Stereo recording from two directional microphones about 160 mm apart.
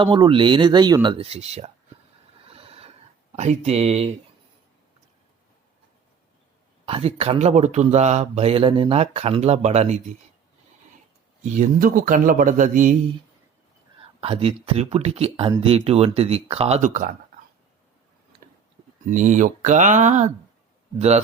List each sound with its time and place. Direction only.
0.0 s speech: 30° right (ahead or behind)
2.5 s a sound: 35° right (ahead or behind)
3.3 s a man's voice: 40° right (ahead or behind)
6.8 s speech: 35° right (ahead or behind)
11.4 s a man's voice: 50° right (ahead or behind)
14.2 s speech: 40° right (ahead or behind)
19.0 s a man's voice: 50° right (ahead or behind)